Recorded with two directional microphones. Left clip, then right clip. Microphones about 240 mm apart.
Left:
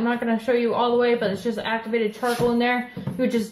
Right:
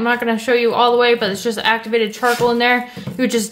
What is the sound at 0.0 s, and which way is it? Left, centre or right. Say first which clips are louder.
Speech: right 7 dB; right.